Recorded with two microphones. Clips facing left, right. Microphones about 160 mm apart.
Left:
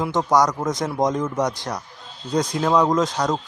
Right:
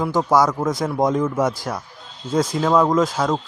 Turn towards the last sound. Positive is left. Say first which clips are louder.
# right 2 dB
turn(degrees=-5)  # may be behind; listen again after turning